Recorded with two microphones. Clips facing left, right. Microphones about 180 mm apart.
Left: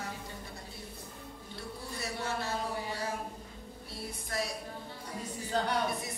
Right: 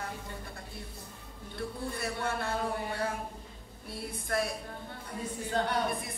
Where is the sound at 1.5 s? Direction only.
55° right (ahead or behind).